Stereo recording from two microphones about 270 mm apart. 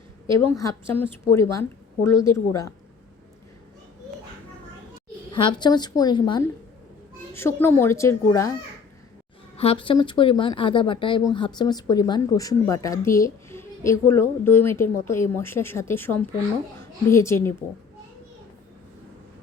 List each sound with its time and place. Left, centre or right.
0.4 s speech: centre
5.3 s speech: centre
9.6 s a woman's voice: centre